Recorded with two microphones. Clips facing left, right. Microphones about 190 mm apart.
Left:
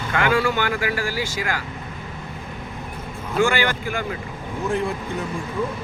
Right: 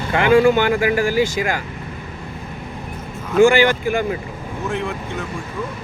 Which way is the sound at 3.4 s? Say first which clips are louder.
Right 8 dB; 15° right (ahead or behind).